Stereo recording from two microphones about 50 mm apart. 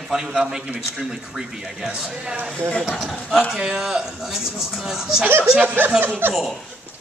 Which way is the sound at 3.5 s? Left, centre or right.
Centre.